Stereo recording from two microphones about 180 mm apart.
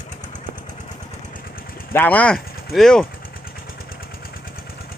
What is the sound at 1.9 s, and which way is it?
Speech, 10° left (ahead or behind).